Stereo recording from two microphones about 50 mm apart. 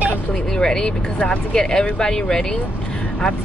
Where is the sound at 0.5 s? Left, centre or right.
Centre.